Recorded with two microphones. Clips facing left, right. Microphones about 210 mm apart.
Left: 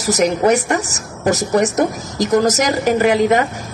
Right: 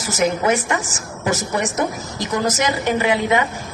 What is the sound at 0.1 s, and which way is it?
A woman's voice, 40° left (ahead or behind).